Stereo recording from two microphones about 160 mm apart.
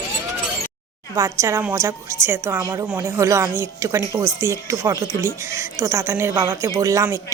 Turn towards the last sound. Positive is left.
turn(degrees=-20)  # may be behind; listen again after turning